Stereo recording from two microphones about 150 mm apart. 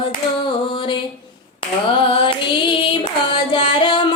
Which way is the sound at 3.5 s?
35° left (ahead or behind).